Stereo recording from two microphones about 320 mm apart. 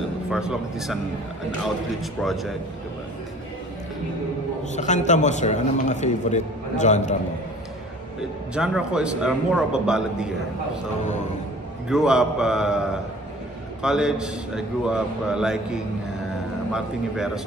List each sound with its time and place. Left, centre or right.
0.3 s a man's voice: centre
2.0 s a man's voice: centre
4.7 s a man's voice: left
8.5 s a man's voice: centre
11.9 s a man's voice: centre
13.8 s a man's voice: centre